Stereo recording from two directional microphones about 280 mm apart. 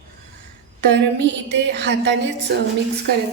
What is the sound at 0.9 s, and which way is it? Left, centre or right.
A woman's voice, right.